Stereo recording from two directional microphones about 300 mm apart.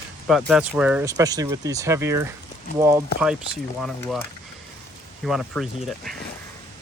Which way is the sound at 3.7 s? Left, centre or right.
Centre.